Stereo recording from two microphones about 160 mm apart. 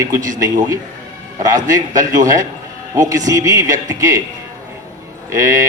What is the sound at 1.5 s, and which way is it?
A man's voice, 20° right (ahead or behind).